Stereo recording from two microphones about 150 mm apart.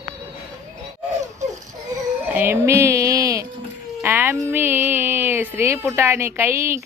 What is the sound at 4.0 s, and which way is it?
Music, 15° right (ahead or behind).